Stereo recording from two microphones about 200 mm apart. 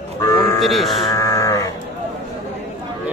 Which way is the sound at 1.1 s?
15° left (ahead or behind).